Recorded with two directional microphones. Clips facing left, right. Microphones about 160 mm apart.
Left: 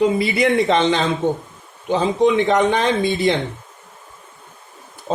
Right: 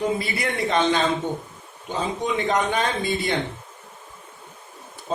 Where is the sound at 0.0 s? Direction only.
90° left.